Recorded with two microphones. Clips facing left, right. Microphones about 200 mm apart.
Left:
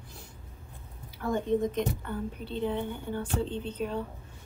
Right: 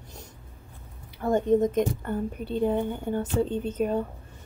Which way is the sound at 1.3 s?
45° right (ahead or behind).